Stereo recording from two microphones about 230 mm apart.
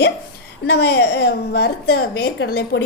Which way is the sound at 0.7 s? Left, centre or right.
Left.